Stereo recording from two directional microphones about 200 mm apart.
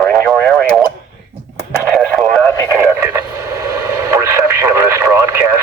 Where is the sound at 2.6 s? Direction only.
15° right (ahead or behind).